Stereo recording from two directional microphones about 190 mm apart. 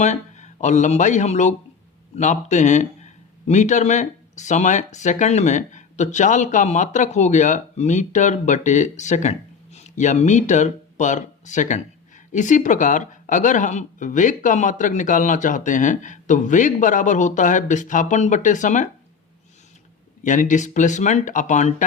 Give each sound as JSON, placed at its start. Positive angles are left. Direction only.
{"t": 0.0, "sound": "a man's voice", "side_deg": 40}
{"t": 20.2, "sound": "a man's voice", "side_deg": 40}